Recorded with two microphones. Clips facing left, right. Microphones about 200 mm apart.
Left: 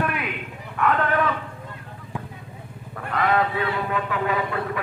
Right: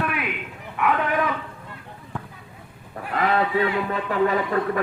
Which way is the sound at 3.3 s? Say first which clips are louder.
Right 3 dB; 35° right (ahead or behind).